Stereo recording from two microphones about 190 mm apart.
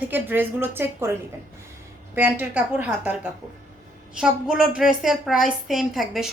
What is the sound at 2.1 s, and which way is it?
A woman's voice, 10° right (ahead or behind).